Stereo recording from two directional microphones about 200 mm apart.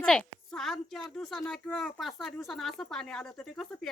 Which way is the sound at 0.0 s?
5° left (ahead or behind).